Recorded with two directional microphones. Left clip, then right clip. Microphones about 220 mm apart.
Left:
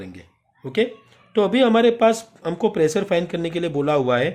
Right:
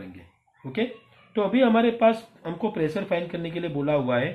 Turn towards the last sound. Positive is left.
turn(degrees=50)  # may be behind; listen again after turning